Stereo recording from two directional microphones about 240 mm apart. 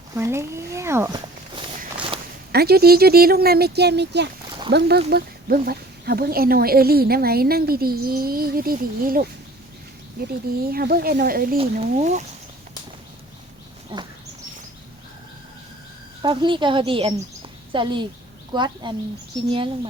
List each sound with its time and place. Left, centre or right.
0.2 s speech: centre
2.5 s speech: right
10.6 s speech: right
11.5 s a woman's voice: right
13.9 s a woman's voice: right
16.2 s a woman's voice: centre